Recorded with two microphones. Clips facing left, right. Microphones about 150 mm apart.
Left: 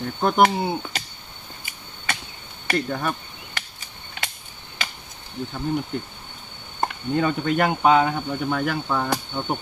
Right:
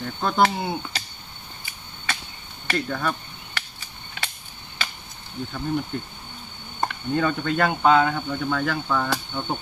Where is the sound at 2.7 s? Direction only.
20° left (ahead or behind).